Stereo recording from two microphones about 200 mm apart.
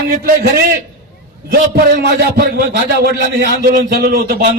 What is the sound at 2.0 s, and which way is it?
A man's voice, 55° right (ahead or behind).